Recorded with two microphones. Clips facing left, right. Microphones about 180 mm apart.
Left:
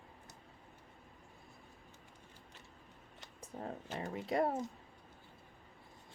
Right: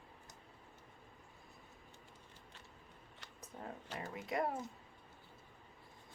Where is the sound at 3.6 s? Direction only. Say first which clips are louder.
Left 4 dB; 25° left (ahead or behind).